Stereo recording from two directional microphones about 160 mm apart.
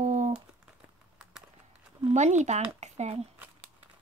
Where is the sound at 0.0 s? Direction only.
45° right (ahead or behind).